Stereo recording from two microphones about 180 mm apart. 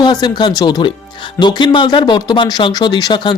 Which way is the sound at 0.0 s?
25° left (ahead or behind).